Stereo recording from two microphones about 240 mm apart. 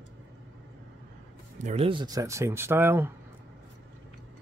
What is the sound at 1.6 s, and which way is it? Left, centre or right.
Speech, right.